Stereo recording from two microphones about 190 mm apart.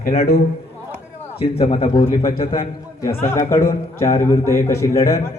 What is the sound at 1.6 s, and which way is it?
Speech, 25° left (ahead or behind).